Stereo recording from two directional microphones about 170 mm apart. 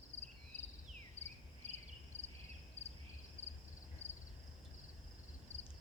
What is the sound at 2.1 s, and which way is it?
Cricket, 40° left (ahead or behind).